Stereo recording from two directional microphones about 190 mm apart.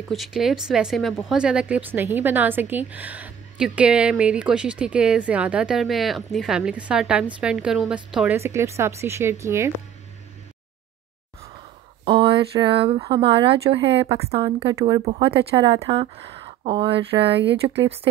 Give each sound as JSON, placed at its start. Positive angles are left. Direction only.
{"t": 0.1, "sound": "speech", "side_deg": 0}
{"t": 12.0, "sound": "a woman's voice", "side_deg": -25}
{"t": 14.7, "sound": "a woman's voice", "side_deg": -20}
{"t": 15.0, "sound": "a woman's voice", "side_deg": -30}
{"t": 17.4, "sound": "speech", "side_deg": -65}